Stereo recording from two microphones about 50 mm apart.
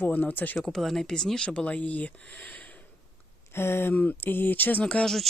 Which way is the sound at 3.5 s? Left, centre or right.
Left.